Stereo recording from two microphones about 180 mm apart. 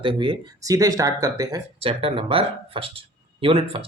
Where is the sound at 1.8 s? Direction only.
30° right (ahead or behind).